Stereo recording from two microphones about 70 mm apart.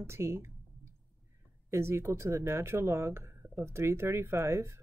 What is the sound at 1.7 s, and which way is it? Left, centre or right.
Speech, right.